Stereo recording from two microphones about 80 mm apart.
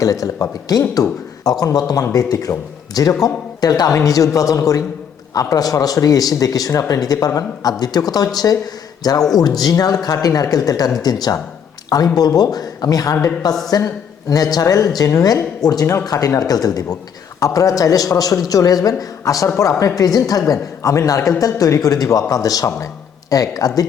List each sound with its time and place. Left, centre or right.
0.0 s speech: left